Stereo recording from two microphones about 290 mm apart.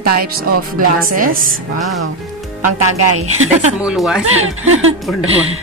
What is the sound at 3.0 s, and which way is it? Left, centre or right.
Speech, right.